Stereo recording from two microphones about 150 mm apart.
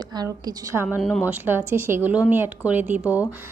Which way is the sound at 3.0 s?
20° left (ahead or behind).